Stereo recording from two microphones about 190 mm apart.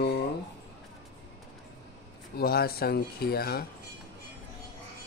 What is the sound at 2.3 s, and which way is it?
Speech, 55° left (ahead or behind).